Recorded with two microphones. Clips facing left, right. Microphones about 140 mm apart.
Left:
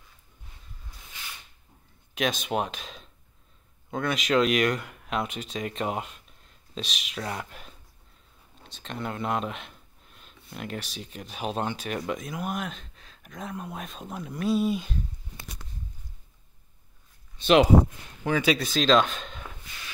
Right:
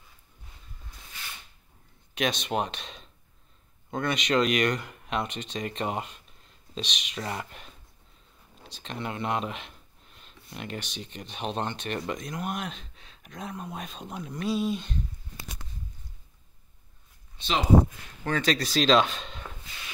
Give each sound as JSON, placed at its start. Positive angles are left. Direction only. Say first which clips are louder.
{"t": 2.1, "sound": "speech", "louder": "left 1 dB", "side_deg": 0}
{"t": 17.4, "sound": "speech", "louder": "left 10 dB", "side_deg": 65}
{"t": 18.2, "sound": "speech", "louder": "left 2 dB", "side_deg": 10}